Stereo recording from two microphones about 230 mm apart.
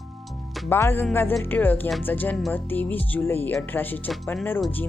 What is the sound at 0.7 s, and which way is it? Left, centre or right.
Speech, centre.